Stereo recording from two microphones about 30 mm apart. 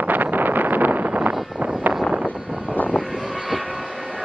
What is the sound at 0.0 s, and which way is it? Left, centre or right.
Wind noise, right.